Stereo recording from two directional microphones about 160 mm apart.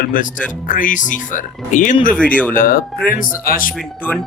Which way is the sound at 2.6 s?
60° left (ahead or behind).